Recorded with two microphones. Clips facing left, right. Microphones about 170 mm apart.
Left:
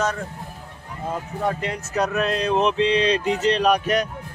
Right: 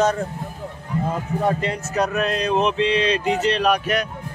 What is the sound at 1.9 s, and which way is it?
Speech, 15° right (ahead or behind).